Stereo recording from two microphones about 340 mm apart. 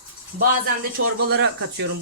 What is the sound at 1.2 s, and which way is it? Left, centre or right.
Speech, right.